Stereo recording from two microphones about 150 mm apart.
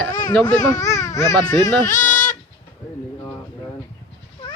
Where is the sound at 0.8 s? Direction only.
20° left (ahead or behind).